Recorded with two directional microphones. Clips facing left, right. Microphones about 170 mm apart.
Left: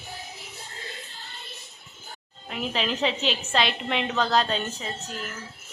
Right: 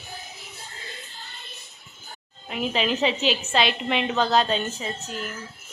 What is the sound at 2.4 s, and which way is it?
A woman's voice, 5° right (ahead or behind).